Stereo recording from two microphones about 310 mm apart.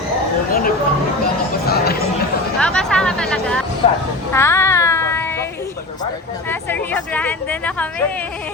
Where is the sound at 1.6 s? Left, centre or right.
Left.